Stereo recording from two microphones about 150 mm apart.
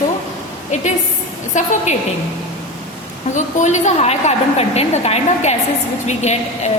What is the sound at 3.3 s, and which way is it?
A woman's voice, 55° left (ahead or behind).